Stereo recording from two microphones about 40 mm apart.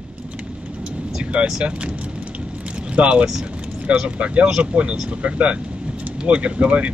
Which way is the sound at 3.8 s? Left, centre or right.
Right.